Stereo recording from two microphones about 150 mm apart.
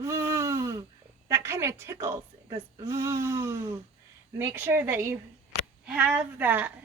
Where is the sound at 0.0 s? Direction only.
20° right (ahead or behind).